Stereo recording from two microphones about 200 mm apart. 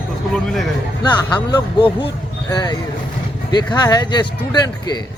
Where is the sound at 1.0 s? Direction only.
20° left (ahead or behind).